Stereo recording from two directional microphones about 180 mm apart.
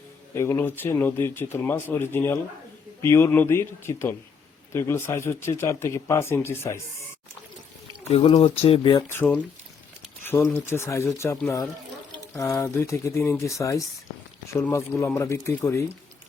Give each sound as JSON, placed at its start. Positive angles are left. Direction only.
{"t": 0.3, "sound": "speech", "side_deg": 15}
{"t": 8.1, "sound": "speech", "side_deg": 30}
{"t": 9.1, "sound": "speech", "side_deg": 10}